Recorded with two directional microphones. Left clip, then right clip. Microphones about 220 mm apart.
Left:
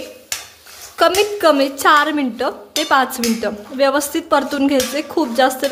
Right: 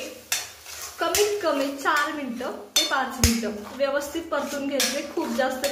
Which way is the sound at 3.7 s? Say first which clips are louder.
Left 10 dB; 50° left (ahead or behind).